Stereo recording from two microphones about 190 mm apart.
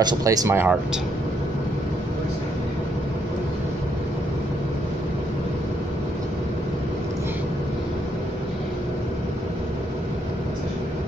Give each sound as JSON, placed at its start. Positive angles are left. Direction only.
{"t": 0.0, "sound": "speech", "side_deg": -20}